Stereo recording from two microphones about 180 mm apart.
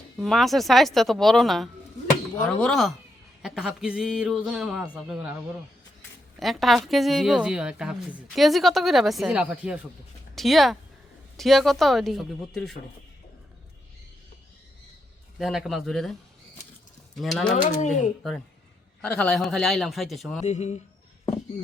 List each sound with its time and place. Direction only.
0.2 s a woman's voice: centre (ahead or behind)
6.4 s a woman's voice: centre (ahead or behind)
15.4 s a woman's voice: centre (ahead or behind)
17.2 s a woman's voice: centre (ahead or behind)
17.5 s speech: 45° left (ahead or behind)
18.2 s a woman's voice: centre (ahead or behind)
20.4 s a man's voice: 40° left (ahead or behind)